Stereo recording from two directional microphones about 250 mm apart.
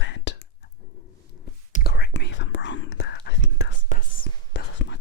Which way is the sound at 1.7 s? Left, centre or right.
Left.